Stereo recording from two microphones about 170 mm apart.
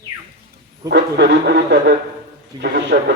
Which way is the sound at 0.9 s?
80° right.